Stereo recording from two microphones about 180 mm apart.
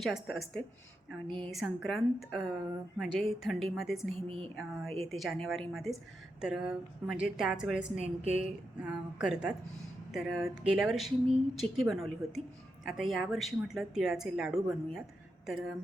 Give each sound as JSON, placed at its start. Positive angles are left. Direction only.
{"t": 0.0, "sound": "speech", "side_deg": 0}
{"t": 4.1, "sound": "speech", "side_deg": -30}
{"t": 4.4, "sound": "speech", "side_deg": 0}
{"t": 7.9, "sound": "speech", "side_deg": -35}
{"t": 8.4, "sound": "speech", "side_deg": -5}